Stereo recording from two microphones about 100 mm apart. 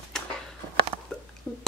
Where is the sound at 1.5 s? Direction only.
10° left (ahead or behind).